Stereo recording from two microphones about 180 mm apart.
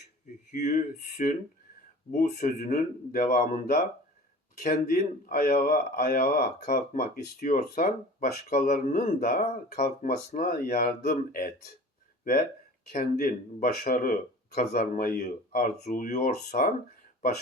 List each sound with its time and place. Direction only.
0.5 s a man's voice: 45° left (ahead or behind)
12.9 s a man's voice: 50° left (ahead or behind)